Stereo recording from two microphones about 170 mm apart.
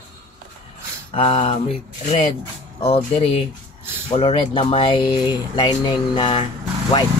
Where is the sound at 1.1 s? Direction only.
35° left (ahead or behind).